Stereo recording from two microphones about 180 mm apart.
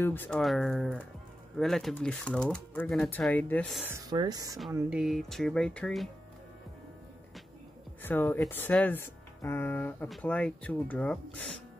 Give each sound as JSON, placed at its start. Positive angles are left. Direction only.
{"t": 0.0, "sound": "speech", "side_deg": 10}
{"t": 3.8, "sound": "speech", "side_deg": -20}
{"t": 4.7, "sound": "speech", "side_deg": -5}
{"t": 8.0, "sound": "speech", "side_deg": 10}